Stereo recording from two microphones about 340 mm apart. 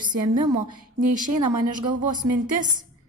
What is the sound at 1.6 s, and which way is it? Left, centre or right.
A woman's voice, right.